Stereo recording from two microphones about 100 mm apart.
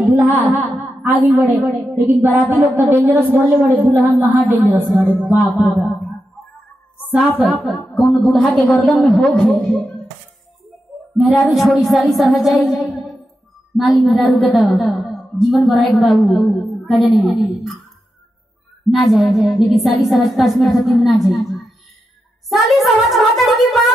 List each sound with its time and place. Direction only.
0.1 s a woman's voice: 20° right (ahead or behind)
1.7 s a woman's voice: centre (ahead or behind)
2.0 s a woman's voice: 20° right (ahead or behind)
7.1 s a woman's voice: 15° right (ahead or behind)
7.9 s a woman's voice: centre (ahead or behind)
11.1 s a woman's voice: centre (ahead or behind)
18.9 s a woman's voice: centre (ahead or behind)